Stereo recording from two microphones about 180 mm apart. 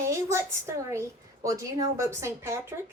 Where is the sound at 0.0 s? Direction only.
15° right (ahead or behind).